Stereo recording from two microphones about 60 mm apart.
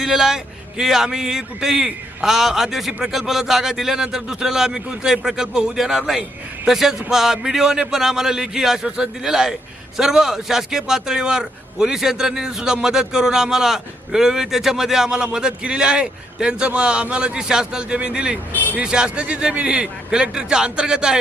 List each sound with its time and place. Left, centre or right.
0.0 s a man's voice: centre
18.5 s speech: left
18.8 s a man's voice: centre